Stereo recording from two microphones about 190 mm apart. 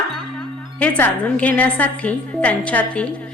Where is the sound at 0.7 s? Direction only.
5° left (ahead or behind).